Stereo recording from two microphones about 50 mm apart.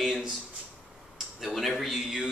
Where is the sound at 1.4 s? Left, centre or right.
Centre.